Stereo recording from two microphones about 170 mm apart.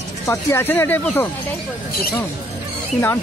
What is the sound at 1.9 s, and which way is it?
Speech, 60° left (ahead or behind).